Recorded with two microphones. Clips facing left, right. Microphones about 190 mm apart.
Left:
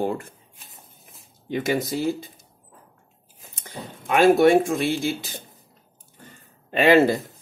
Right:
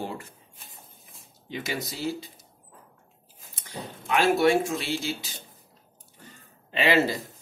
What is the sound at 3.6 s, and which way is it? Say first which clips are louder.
Speech: left 1 dB; 50° left (ahead or behind).